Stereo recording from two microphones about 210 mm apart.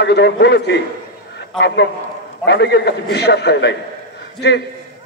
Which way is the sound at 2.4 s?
55° left (ahead or behind).